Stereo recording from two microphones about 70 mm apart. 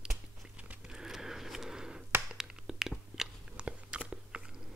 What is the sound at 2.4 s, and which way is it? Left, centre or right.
Biting, centre.